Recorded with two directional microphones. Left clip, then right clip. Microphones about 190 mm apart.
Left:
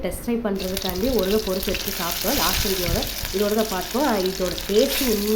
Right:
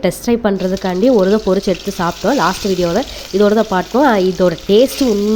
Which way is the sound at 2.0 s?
40° right (ahead or behind).